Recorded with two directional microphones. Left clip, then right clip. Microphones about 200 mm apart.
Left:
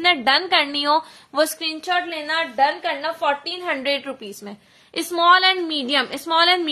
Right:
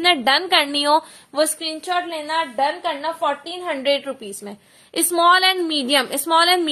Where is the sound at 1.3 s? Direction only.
15° left (ahead or behind).